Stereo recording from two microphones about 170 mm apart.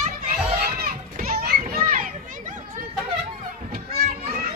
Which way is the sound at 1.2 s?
60° right (ahead or behind).